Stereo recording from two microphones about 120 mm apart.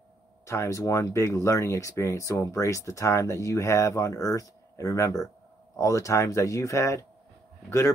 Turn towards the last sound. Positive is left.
turn(degrees=20)  # may be behind; listen again after turning